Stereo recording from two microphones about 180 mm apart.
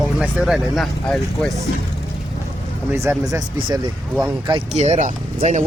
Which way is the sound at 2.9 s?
15° right (ahead or behind).